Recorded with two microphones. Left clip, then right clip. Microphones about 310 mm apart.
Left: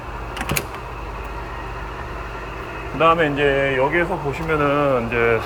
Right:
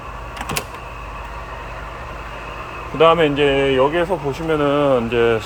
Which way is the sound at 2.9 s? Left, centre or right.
Right.